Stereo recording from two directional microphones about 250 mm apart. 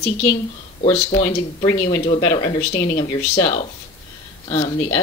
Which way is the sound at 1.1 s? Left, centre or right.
Left.